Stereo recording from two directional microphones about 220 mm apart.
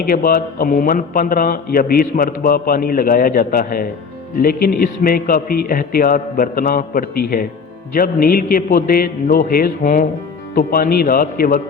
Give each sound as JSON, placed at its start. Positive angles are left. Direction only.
{"t": 0.0, "sound": "a man's voice", "side_deg": 40}